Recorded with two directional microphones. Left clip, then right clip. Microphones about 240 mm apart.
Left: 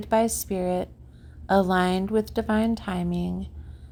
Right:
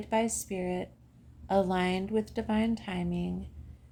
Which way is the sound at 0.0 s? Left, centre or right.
Left.